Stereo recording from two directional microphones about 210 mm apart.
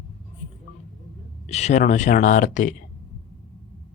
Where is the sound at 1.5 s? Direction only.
30° left (ahead or behind).